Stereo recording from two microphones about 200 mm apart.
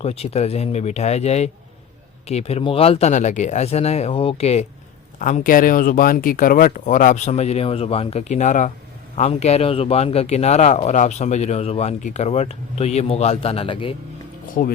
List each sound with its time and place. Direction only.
0.0 s a man's voice: 30° left (ahead or behind)
5.2 s a man's voice: 40° left (ahead or behind); by 13.9 s 25° left (ahead or behind)
14.6 s speech: 40° left (ahead or behind)